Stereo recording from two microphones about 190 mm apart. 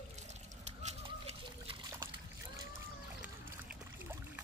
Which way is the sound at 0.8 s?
30° right (ahead or behind).